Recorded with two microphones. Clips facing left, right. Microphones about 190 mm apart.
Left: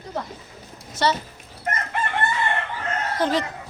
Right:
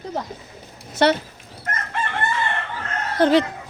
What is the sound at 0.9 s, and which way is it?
Speech, 60° right (ahead or behind).